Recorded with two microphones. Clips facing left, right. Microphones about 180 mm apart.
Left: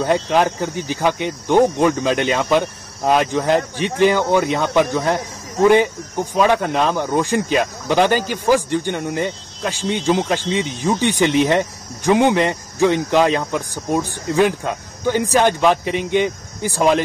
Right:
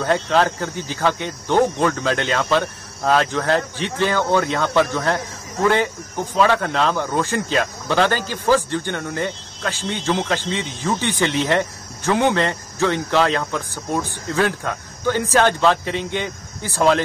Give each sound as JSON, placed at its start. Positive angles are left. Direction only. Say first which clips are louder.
{"t": 0.0, "sound": "speech", "louder": "left 2 dB", "side_deg": 15}